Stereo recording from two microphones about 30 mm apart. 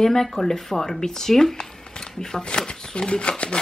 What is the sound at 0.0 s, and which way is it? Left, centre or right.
Speech, centre.